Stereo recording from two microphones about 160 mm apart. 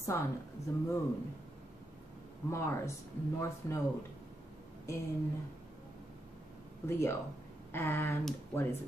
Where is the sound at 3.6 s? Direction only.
20° left (ahead or behind).